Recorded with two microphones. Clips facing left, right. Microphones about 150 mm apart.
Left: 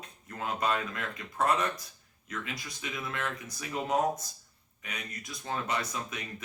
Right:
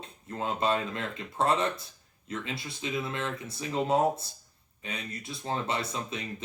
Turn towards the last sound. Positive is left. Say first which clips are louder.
# right 3 dB
turn(degrees=-30)  # may be behind; listen again after turning